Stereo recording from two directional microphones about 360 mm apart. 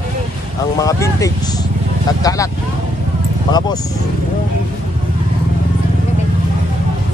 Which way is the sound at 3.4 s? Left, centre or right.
Centre.